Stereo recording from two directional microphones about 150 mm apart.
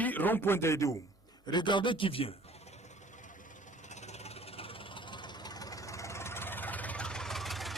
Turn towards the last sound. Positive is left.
turn(degrees=0)  # may be behind; listen again after turning